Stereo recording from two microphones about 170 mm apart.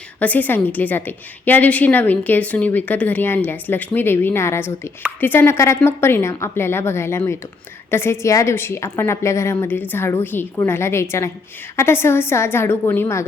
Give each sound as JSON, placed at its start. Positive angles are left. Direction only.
{"t": 0.2, "sound": "a woman's voice", "side_deg": 10}